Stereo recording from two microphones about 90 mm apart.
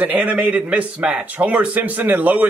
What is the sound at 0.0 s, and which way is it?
A man's voice, 20° right (ahead or behind).